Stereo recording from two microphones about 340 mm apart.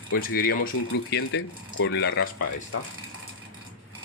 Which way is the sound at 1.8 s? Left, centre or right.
Left.